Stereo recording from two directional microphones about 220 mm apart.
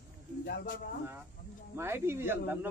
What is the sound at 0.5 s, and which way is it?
Speech, 50° left (ahead or behind).